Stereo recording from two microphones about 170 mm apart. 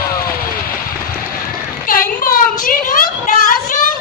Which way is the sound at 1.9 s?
55° left (ahead or behind).